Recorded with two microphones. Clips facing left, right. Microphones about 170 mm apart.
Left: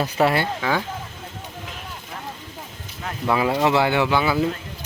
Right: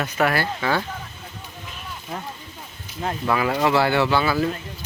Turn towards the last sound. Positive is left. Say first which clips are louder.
# even
turn(degrees=15)  # may be behind; listen again after turning